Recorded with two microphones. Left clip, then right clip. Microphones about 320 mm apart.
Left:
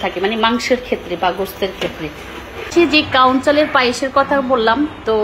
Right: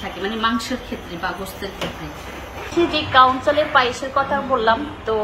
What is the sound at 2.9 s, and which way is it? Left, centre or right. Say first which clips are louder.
A woman's voice: right 1 dB; left.